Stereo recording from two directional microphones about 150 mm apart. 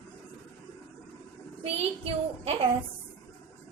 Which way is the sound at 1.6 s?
40° right (ahead or behind).